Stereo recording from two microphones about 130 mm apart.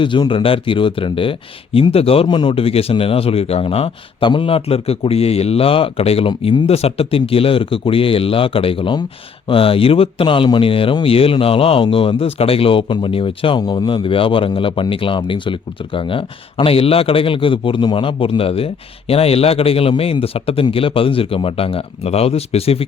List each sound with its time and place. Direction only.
0.0 s speech: 40° left (ahead or behind)